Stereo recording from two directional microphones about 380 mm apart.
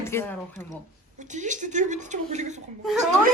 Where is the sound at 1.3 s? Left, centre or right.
Centre.